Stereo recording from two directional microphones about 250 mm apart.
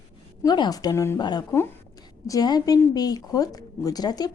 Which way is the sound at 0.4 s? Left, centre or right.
Centre.